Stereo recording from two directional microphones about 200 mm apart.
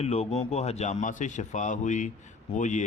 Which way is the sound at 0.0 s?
30° left (ahead or behind).